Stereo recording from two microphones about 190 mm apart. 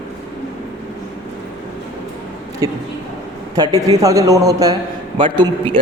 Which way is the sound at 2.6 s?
20° right (ahead or behind).